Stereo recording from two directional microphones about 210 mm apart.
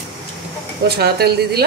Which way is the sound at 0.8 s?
50° right (ahead or behind).